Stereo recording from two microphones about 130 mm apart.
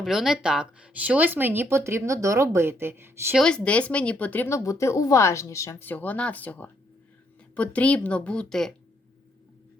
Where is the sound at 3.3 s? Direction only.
5° left (ahead or behind).